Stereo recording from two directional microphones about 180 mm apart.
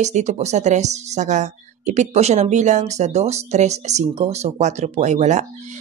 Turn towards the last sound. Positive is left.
turn(degrees=-40)  # may be behind; listen again after turning